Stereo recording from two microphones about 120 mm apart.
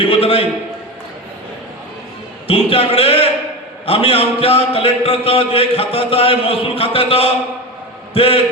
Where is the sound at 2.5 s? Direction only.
50° left (ahead or behind).